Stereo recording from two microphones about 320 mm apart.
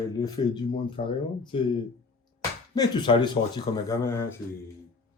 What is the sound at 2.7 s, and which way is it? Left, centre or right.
Speech, centre.